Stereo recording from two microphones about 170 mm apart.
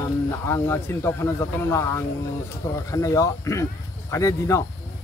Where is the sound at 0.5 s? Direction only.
15° left (ahead or behind).